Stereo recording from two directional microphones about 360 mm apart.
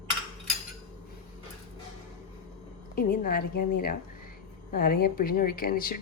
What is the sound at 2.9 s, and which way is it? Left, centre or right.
A woman's voice, left.